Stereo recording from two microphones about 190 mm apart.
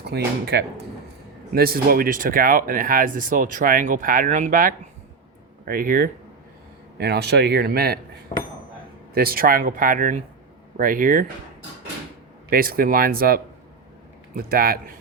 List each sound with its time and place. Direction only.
0.0 s speech: 60° right (ahead or behind)
7.0 s speech: 60° right (ahead or behind)
9.1 s speech: 50° right (ahead or behind)
12.5 s speech: 50° right (ahead or behind)